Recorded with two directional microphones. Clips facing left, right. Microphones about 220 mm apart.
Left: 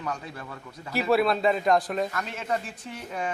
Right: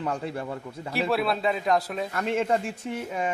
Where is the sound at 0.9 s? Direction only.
Centre (ahead or behind).